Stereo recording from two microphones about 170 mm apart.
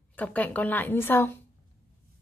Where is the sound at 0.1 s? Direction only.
10° left (ahead or behind).